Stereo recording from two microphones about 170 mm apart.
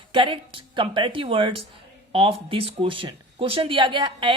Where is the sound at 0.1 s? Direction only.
30° right (ahead or behind).